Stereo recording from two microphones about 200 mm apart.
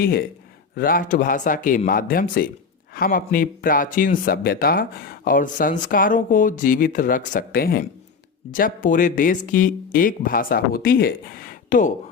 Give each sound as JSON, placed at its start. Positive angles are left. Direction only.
{"t": 0.0, "sound": "speech", "side_deg": 50}